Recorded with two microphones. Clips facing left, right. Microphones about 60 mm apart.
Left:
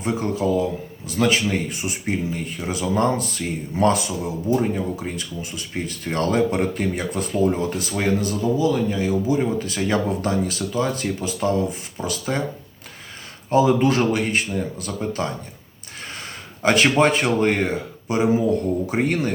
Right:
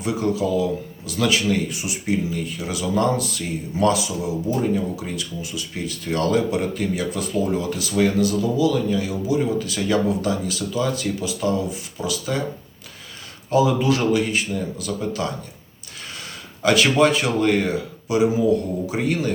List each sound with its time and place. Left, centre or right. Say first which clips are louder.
0.0 s speech: even; left
4.5 s speech: left 1 dB; left
5.0 s speech: even; left
13.5 s speech: left 1 dB; left
16.6 s speech: even; left